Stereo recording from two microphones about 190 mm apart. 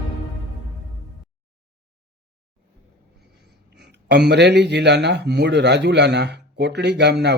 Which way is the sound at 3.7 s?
65° right (ahead or behind).